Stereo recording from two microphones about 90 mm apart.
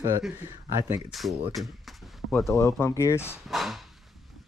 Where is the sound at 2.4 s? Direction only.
30° left (ahead or behind).